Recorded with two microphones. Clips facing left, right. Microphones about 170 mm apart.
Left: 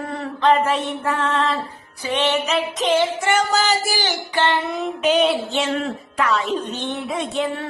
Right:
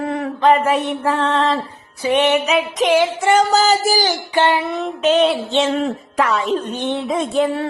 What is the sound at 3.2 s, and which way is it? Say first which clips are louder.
Music: right 5 dB; 35° right (ahead or behind).